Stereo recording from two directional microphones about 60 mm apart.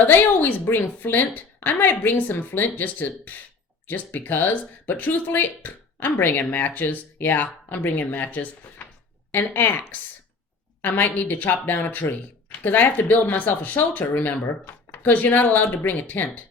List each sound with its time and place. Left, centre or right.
0.0 s speech: left